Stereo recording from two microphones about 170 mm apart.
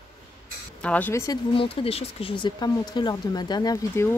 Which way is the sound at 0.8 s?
10° left (ahead or behind).